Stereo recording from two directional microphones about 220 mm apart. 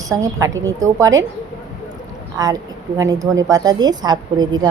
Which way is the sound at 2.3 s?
15° right (ahead or behind).